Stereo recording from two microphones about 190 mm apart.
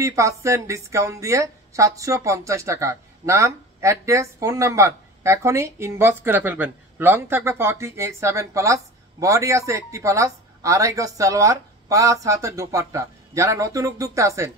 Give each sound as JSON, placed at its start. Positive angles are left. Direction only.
{"t": 0.0, "sound": "a woman's voice", "side_deg": -15}